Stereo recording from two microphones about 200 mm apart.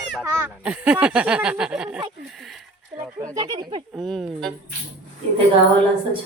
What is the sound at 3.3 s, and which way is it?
Speech, 20° right (ahead or behind).